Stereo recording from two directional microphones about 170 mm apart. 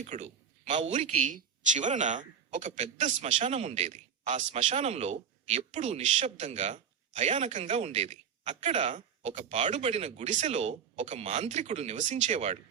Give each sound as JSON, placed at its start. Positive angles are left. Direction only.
{"t": 0.0, "sound": "speech", "side_deg": -45}